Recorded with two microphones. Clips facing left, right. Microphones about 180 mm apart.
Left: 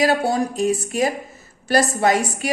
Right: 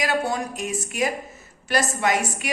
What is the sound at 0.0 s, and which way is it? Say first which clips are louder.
A woman's voice: left 6 dB; 35° left (ahead or behind).